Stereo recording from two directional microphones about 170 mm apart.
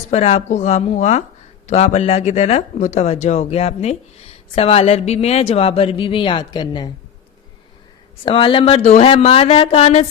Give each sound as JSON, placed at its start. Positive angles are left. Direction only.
{"t": 0.1, "sound": "a woman's voice", "side_deg": 40}
{"t": 8.2, "sound": "speech", "side_deg": 30}